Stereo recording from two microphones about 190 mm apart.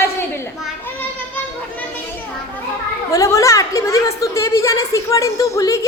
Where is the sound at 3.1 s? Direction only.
15° left (ahead or behind).